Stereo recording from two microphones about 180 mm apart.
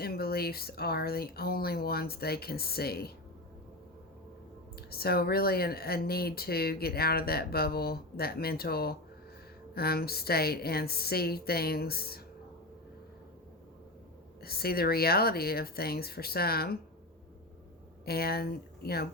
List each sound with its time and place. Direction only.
0.0 s speech: 60° left (ahead or behind)
4.9 s speech: 60° left (ahead or behind)
14.4 s speech: 60° left (ahead or behind)
18.0 s speech: 60° left (ahead or behind)